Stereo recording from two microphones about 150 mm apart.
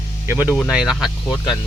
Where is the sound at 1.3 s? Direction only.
30° left (ahead or behind).